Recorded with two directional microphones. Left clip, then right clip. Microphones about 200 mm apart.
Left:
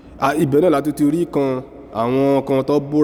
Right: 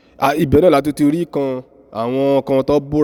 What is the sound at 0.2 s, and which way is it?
A man's voice, 45° right (ahead or behind).